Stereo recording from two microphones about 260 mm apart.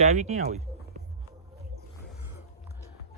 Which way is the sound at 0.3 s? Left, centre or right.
Right.